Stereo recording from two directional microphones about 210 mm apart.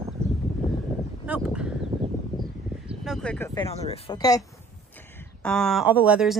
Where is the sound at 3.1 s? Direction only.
5° left (ahead or behind).